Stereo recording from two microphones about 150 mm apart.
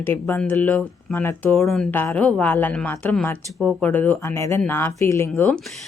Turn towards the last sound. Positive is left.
turn(degrees=15)  # may be behind; listen again after turning